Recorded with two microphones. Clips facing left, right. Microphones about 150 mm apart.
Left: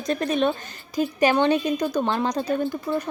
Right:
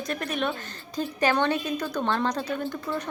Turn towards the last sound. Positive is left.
turn(degrees=10)  # may be behind; listen again after turning